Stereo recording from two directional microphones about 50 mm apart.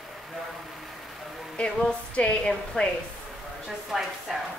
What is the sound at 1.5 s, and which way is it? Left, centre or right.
Music, left.